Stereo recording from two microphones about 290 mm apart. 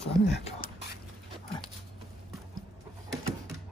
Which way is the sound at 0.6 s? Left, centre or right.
Left.